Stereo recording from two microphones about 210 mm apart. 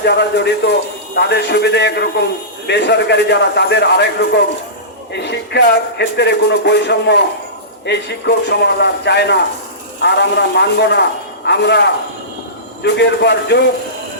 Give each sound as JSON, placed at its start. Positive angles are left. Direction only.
{"t": 0.0, "sound": "a man's voice", "side_deg": 55}